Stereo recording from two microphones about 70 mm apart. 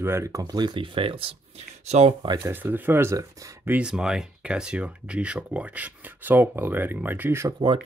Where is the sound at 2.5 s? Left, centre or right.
Right.